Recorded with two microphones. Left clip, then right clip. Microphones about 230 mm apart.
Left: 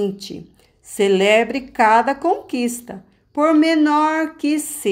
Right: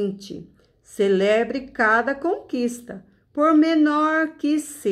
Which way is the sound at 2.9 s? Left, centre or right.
Left.